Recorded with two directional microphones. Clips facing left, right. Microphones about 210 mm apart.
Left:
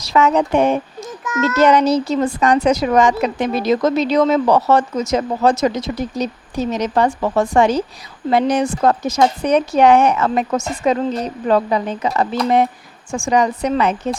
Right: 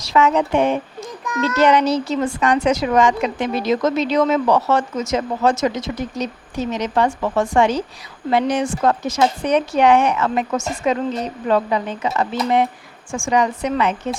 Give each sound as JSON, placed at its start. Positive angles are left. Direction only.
{"t": 0.0, "sound": "speech", "side_deg": 40}
{"t": 1.2, "sound": "a child's voice", "side_deg": 0}
{"t": 1.5, "sound": "speech", "side_deg": 40}